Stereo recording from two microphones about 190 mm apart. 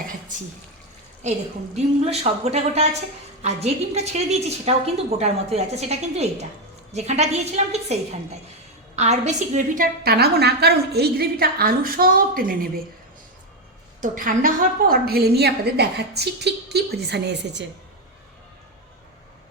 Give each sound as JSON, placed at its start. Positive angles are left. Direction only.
{"t": 1.7, "sound": "a woman's voice", "side_deg": -35}
{"t": 9.0, "sound": "a woman's voice", "side_deg": -35}
{"t": 14.0, "sound": "a woman's voice", "side_deg": -45}